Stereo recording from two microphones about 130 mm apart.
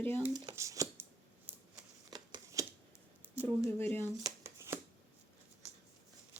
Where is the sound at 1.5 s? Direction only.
15° right (ahead or behind).